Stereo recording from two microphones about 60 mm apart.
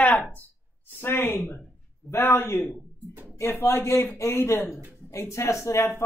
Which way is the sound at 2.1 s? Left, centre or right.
Left.